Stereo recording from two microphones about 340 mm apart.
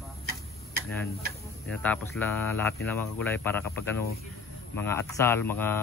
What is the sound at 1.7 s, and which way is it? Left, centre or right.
Speech, centre.